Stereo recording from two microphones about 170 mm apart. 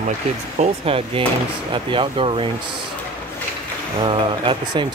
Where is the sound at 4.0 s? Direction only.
30° right (ahead or behind).